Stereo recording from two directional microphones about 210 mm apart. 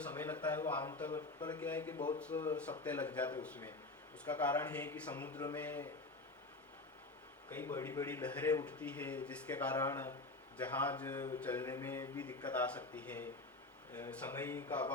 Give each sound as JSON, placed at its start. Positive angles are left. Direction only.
{"t": 0.0, "sound": "speech", "side_deg": 10}
{"t": 1.4, "sound": "speech", "side_deg": 20}
{"t": 1.6, "sound": "speech", "side_deg": 10}
{"t": 7.5, "sound": "speech", "side_deg": 10}